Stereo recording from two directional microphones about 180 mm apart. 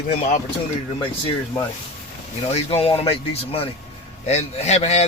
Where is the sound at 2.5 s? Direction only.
35° left (ahead or behind).